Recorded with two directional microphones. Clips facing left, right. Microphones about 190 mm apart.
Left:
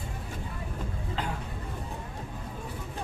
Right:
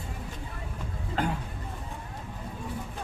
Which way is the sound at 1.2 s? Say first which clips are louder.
Right 6 dB; 50° right (ahead or behind).